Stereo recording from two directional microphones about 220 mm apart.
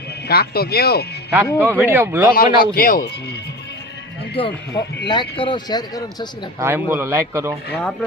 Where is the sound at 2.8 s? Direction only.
40° left (ahead or behind).